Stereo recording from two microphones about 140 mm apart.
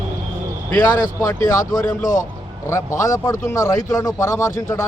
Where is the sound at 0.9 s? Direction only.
25° left (ahead or behind).